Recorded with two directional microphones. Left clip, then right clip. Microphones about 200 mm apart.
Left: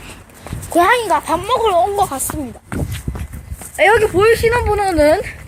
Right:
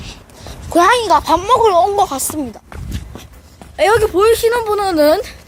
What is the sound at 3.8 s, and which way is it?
Speech, 10° right (ahead or behind).